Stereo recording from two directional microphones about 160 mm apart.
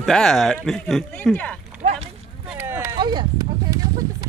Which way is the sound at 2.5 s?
15° right (ahead or behind).